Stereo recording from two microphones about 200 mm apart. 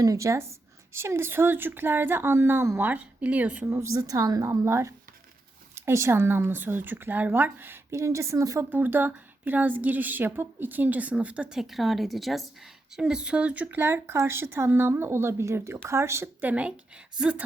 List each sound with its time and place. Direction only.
0.0 s speech: 15° right (ahead or behind)